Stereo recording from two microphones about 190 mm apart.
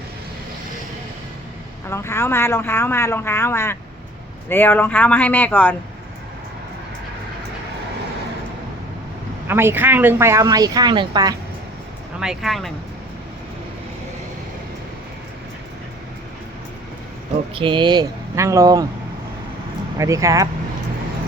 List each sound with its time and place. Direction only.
1.9 s speech: 15° left (ahead or behind)
9.5 s speech: 10° right (ahead or behind)
12.2 s speech: centre (ahead or behind)
17.5 s speech: 25° right (ahead or behind)
20.0 s speech: 15° right (ahead or behind)